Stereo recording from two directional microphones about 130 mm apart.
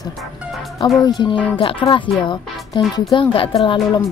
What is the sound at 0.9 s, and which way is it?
A woman's voice, 35° left (ahead or behind).